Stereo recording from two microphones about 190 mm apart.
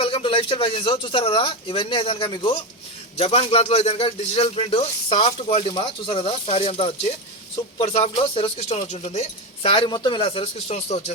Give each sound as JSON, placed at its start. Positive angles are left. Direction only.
{"t": 0.0, "sound": "a man's voice", "side_deg": 30}